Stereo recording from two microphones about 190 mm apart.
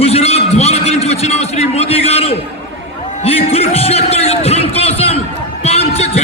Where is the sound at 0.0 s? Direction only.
35° left (ahead or behind).